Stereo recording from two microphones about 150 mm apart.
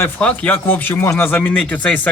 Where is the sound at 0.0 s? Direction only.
10° left (ahead or behind).